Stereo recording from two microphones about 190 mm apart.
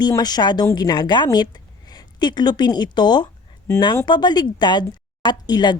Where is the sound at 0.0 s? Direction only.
20° left (ahead or behind).